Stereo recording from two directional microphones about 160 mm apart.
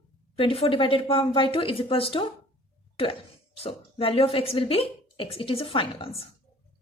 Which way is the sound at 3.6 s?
35° left (ahead or behind).